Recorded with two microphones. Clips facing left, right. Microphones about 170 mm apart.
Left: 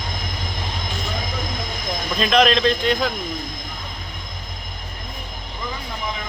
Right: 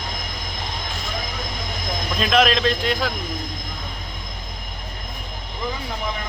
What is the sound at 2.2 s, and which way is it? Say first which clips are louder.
Speech: left 2 dB; centre (ahead or behind).